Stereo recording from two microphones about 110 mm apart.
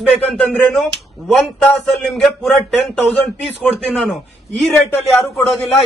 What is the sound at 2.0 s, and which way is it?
Speech, 5° left (ahead or behind).